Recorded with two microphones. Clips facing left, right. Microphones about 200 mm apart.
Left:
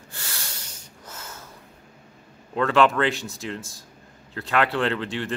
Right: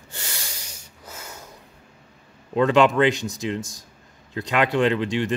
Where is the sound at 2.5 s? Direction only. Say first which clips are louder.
Right 3 dB; 15° right (ahead or behind).